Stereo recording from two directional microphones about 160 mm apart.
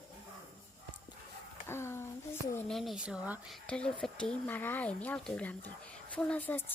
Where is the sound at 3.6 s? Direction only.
5° left (ahead or behind).